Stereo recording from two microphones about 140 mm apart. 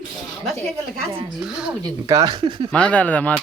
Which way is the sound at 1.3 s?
5° right (ahead or behind).